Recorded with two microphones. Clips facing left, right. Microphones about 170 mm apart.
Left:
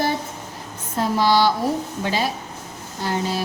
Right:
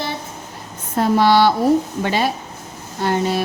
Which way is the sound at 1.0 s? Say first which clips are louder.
Right 4 dB; 60° right (ahead or behind).